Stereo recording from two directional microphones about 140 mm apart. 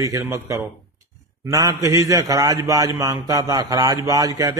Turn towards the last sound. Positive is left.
turn(degrees=-25)  # may be behind; listen again after turning